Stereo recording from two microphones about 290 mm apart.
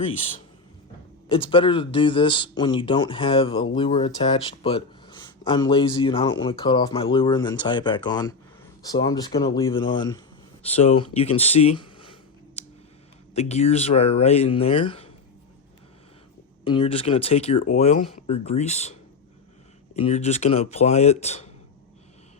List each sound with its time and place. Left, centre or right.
1.3 s speech: centre
12.6 s clicking: left
13.3 s speech: left
16.6 s speech: centre
20.0 s speech: left